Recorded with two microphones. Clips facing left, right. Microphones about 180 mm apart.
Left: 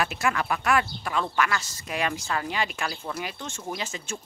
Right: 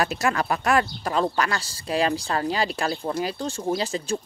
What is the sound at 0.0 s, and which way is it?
Speech, 40° right (ahead or behind).